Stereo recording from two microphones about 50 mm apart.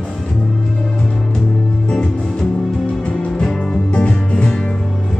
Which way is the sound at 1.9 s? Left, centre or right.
Centre.